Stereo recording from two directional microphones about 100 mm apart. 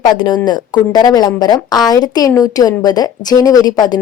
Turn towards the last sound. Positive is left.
turn(degrees=40)  # may be behind; listen again after turning